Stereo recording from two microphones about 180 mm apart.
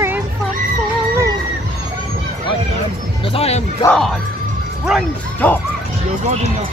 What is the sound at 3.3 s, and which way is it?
Music, 35° left (ahead or behind).